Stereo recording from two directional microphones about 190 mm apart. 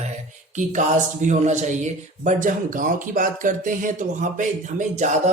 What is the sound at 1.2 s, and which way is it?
Speech, 40° right (ahead or behind).